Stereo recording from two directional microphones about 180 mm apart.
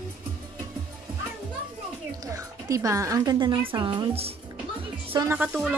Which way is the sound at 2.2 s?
20° right (ahead or behind).